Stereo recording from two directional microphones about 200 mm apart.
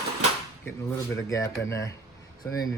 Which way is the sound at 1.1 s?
15° left (ahead or behind).